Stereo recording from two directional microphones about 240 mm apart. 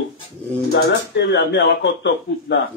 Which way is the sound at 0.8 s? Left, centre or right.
Left.